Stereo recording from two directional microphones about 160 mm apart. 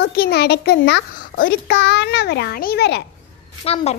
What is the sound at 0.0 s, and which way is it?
A child's voice, 85° left.